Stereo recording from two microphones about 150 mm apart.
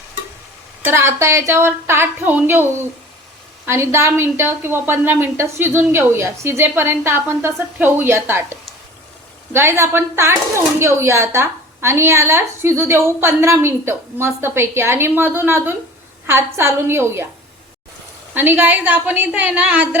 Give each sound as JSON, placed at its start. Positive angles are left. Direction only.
{"t": 0.9, "sound": "speech", "side_deg": -15}
{"t": 3.7, "sound": "speech", "side_deg": -20}
{"t": 18.3, "sound": "speech", "side_deg": -15}